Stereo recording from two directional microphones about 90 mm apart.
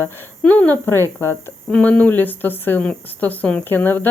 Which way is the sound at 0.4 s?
20° left (ahead or behind).